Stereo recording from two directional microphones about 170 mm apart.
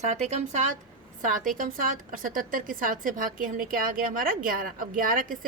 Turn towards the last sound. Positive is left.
turn(degrees=-50)  # may be behind; listen again after turning